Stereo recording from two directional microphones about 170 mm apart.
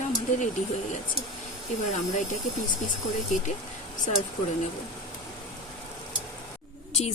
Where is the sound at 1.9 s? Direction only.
45° left (ahead or behind).